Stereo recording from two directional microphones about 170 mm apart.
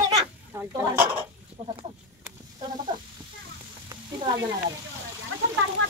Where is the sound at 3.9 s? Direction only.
25° right (ahead or behind).